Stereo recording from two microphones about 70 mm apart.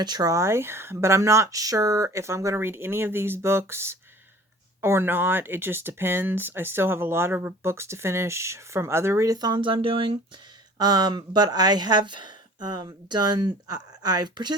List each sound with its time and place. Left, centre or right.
0.0 s speech: right
0.3 s speech: right
2.1 s speech: right
10.8 s speech: right